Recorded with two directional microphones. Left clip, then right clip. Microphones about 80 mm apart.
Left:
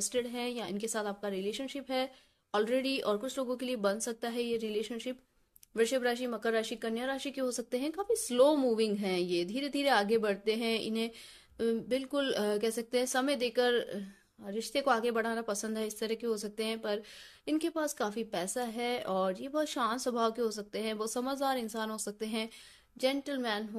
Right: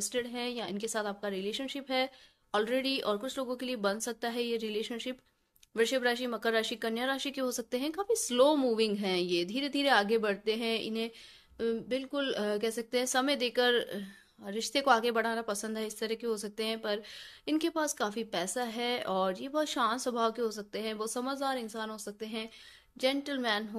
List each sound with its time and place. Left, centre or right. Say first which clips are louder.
0.0 s speech: even; left
22.9 s speech: right 1 dB; left